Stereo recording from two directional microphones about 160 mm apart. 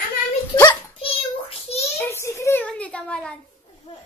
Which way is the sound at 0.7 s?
35° left (ahead or behind).